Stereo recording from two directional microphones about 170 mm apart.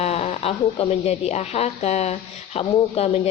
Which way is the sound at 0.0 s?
40° left (ahead or behind).